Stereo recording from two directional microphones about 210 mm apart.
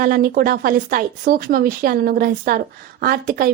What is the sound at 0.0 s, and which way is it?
Speech, 45° right (ahead or behind).